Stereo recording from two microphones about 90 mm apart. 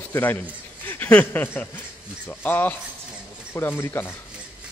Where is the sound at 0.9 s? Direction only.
15° left (ahead or behind).